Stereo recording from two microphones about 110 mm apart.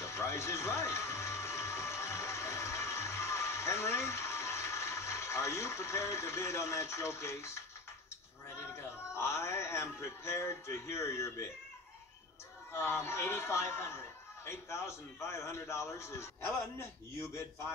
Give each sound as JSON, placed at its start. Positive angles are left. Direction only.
{"t": 0.0, "sound": "music", "side_deg": 25}
{"t": 9.1, "sound": "a man's voice", "side_deg": 25}
{"t": 12.7, "sound": "a man's voice", "side_deg": 25}